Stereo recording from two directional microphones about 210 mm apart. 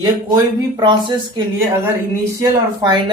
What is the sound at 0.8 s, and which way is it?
Speech, 20° right (ahead or behind).